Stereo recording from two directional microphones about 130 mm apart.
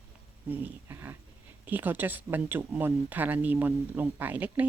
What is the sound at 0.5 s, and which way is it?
Speech, 15° right (ahead or behind).